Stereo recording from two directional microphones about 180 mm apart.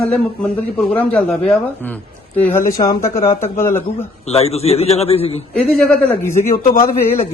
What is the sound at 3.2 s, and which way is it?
Speech, 35° left (ahead or behind).